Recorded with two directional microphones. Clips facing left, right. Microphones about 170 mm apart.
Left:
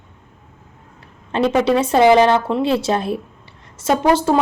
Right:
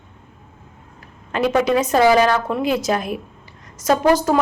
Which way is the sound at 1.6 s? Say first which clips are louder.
Left 3 dB; 30° left (ahead or behind).